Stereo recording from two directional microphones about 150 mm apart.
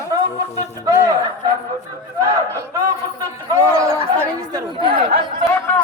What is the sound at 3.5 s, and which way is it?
Chatter, 20° right (ahead or behind).